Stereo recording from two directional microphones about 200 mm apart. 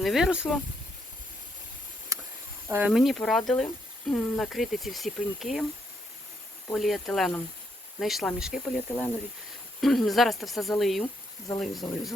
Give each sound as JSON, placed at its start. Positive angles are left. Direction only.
{"t": 0.0, "sound": "speech", "side_deg": 0}
{"t": 2.1, "sound": "a sound", "side_deg": -15}
{"t": 2.6, "sound": "speech", "side_deg": -10}
{"t": 6.7, "sound": "speech", "side_deg": 0}